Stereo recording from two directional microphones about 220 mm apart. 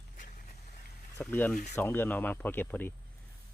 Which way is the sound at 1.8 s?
10° left (ahead or behind).